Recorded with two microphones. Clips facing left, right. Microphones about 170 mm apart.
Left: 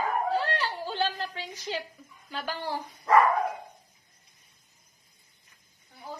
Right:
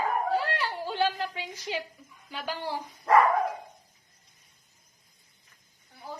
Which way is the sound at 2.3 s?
15° right (ahead or behind).